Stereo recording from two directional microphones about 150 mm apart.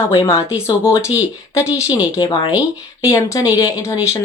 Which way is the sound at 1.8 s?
10° right (ahead or behind).